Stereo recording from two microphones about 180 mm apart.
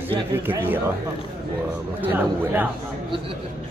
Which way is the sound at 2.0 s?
10° right (ahead or behind).